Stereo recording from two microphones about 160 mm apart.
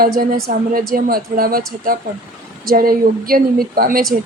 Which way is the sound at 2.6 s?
65° right (ahead or behind).